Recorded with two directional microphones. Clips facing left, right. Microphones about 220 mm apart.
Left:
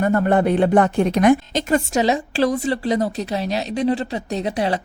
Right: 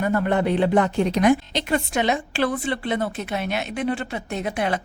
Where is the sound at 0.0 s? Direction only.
45° left (ahead or behind).